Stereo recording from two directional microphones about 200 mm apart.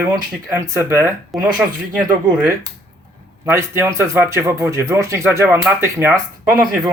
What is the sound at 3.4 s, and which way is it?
Speech, 15° right (ahead or behind).